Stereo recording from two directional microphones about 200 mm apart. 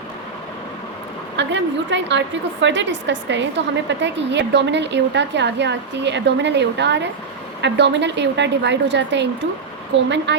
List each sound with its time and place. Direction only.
1.4 s a woman's voice: 65° right (ahead or behind)